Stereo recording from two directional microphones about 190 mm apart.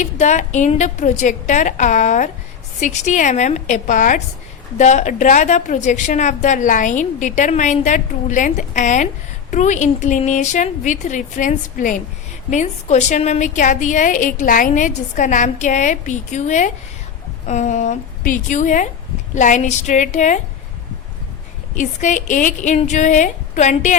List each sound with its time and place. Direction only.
0.0 s a woman's voice: 40° left (ahead or behind)
21.8 s a woman's voice: 40° left (ahead or behind)